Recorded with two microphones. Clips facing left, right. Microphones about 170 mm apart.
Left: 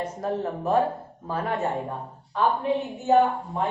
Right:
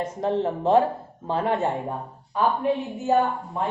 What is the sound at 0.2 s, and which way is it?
Speech, 25° right (ahead or behind).